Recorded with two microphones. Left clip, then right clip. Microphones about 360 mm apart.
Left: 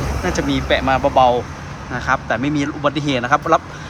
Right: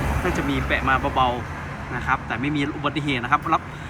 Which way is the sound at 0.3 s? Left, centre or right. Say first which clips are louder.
Left 5 dB; centre.